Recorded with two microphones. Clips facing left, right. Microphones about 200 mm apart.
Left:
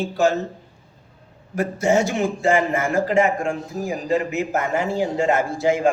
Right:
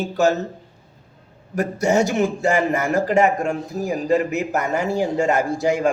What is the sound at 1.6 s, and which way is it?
Speech, 40° right (ahead or behind).